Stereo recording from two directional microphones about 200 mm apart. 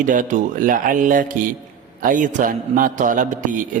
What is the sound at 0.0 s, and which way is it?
A man's voice, 40° right (ahead or behind).